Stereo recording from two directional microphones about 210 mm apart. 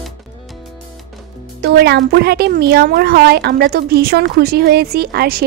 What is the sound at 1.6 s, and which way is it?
Speech, 50° right (ahead or behind).